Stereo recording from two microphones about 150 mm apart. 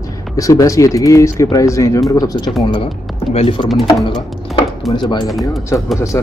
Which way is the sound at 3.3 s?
35° left (ahead or behind).